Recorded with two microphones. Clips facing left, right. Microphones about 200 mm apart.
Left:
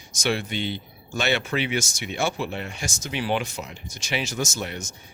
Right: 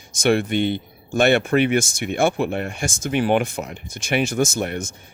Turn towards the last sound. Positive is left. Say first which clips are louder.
# right 8 dB
turn(degrees=-55)  # may be behind; listen again after turning